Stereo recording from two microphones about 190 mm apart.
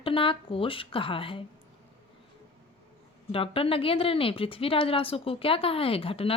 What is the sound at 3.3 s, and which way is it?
A woman's voice, 30° left (ahead or behind).